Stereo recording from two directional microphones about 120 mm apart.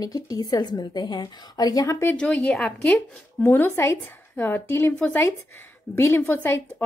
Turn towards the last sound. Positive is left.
turn(degrees=20)  # may be behind; listen again after turning